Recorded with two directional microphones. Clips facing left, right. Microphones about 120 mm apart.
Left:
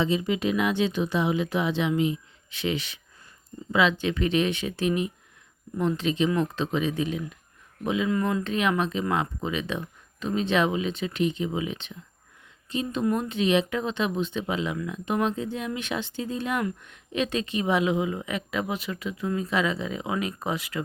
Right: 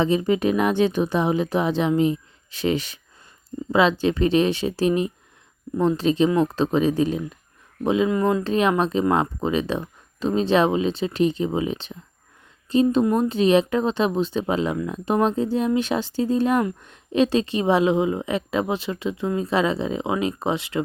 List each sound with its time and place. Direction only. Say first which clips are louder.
0.0 s a woman's voice: right 5 dB; 45° right (ahead or behind); by 20.8 s 25° right (ahead or behind)